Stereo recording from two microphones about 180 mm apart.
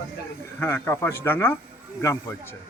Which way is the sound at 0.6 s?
15° left (ahead or behind).